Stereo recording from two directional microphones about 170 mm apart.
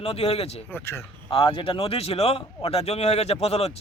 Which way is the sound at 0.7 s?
15° left (ahead or behind).